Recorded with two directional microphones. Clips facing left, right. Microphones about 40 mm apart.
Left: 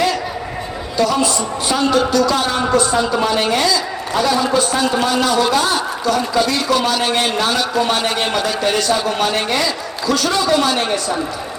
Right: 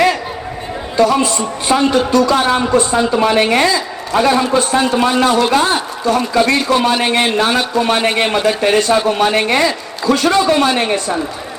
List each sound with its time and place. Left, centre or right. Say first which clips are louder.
0.9 s a man's voice: right 4 dB; right